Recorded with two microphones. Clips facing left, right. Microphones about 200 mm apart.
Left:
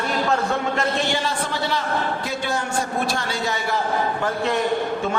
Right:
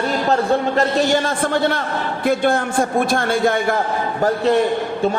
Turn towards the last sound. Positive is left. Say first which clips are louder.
# right 8 dB
turn(degrees=-50)  # may be behind; listen again after turning